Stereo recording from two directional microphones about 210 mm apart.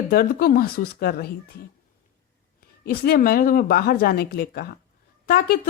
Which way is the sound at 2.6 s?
45° left (ahead or behind).